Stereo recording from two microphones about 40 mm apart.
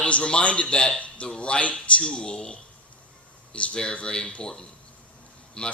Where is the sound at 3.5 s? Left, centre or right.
Left.